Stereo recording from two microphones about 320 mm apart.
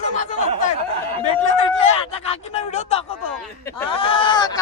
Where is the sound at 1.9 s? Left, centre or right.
Centre.